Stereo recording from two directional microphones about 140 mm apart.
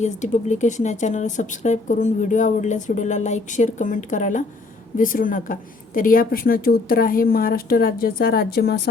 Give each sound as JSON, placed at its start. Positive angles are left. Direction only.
{"t": 0.0, "sound": "a woman's voice", "side_deg": 60}